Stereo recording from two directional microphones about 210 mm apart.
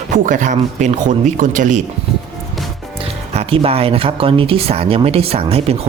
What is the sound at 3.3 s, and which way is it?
Speech, 30° right (ahead or behind).